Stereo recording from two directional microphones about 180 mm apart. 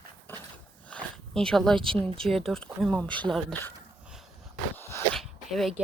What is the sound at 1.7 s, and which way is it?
Speech, 30° right (ahead or behind).